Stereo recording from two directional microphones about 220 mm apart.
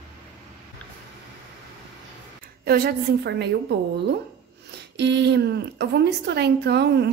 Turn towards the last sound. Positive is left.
turn(degrees=-50)  # may be behind; listen again after turning